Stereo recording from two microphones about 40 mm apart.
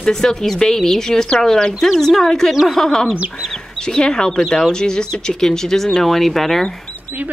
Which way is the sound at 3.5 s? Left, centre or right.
Centre.